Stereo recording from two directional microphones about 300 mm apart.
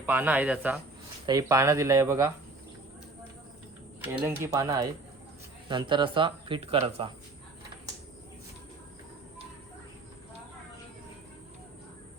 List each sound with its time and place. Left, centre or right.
0.0 s speech: centre
4.0 s speech: centre